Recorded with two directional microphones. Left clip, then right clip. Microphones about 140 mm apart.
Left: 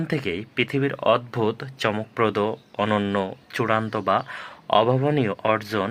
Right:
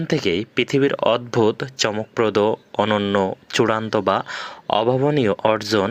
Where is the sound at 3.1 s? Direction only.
25° right (ahead or behind).